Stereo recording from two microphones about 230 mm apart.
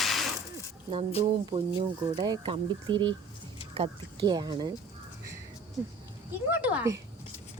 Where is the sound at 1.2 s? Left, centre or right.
Centre.